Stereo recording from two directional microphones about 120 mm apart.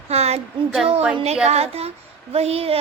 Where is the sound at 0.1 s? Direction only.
60° right (ahead or behind).